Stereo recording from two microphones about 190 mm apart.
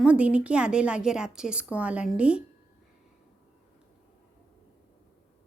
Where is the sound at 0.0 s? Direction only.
5° right (ahead or behind).